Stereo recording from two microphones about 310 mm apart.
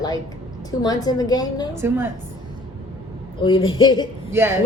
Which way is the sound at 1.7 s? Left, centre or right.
Centre.